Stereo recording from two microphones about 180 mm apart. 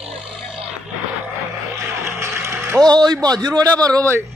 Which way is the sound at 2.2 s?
15° right (ahead or behind).